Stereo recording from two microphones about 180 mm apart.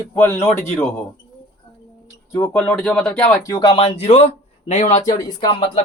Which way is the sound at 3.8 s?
35° left (ahead or behind).